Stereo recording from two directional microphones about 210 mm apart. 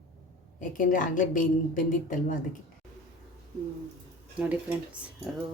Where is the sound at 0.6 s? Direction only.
40° left (ahead or behind).